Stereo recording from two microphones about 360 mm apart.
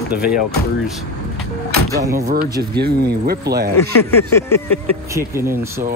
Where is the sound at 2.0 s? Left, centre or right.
Centre.